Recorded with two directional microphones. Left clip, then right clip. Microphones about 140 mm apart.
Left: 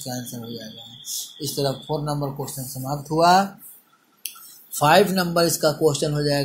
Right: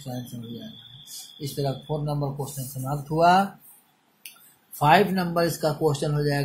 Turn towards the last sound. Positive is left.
turn(degrees=10)  # may be behind; listen again after turning